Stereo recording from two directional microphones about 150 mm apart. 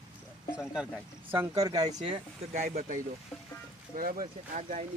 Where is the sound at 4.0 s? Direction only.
65° right (ahead or behind).